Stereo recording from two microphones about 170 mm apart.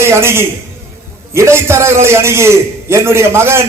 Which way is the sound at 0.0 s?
15° right (ahead or behind).